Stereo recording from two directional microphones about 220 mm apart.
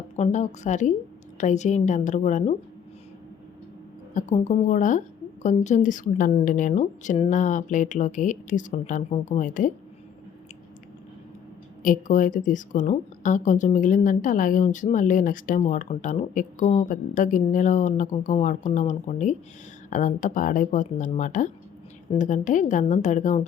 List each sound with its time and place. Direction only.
0.2 s a woman's voice: 35° left (ahead or behind)
4.1 s a woman's voice: 35° left (ahead or behind)
11.8 s a woman's voice: 35° left (ahead or behind)